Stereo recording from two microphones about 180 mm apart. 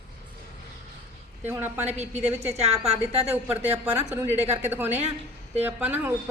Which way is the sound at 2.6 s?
35° right (ahead or behind).